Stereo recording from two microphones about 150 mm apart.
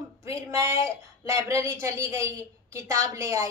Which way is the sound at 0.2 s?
20° right (ahead or behind).